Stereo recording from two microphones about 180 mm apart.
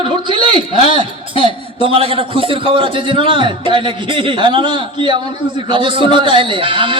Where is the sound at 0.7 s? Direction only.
35° left (ahead or behind).